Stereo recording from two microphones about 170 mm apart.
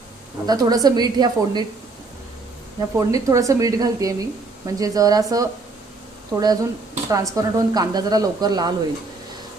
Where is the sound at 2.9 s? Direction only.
20° right (ahead or behind).